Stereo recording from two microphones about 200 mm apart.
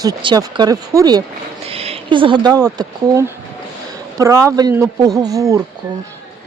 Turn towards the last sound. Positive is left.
turn(degrees=-15)  # may be behind; listen again after turning